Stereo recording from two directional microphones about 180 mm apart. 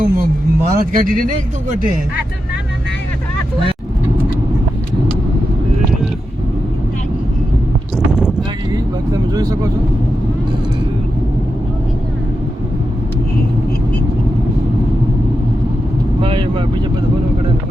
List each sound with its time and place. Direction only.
0.0 s a sound: 50° right (ahead or behind)
9.1 s vehicle: 20° right (ahead or behind)
16.2 s vehicle: 30° right (ahead or behind)